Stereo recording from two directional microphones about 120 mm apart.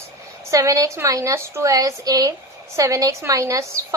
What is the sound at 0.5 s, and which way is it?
A woman's voice, 30° right (ahead or behind).